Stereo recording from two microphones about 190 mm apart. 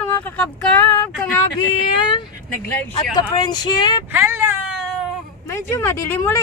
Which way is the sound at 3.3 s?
20° left (ahead or behind).